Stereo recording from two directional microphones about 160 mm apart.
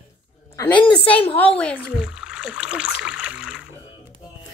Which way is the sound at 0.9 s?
10° left (ahead or behind).